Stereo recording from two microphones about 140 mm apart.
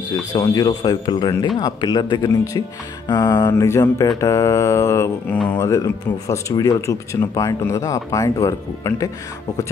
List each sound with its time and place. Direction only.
0.3 s speech: 25° left (ahead or behind)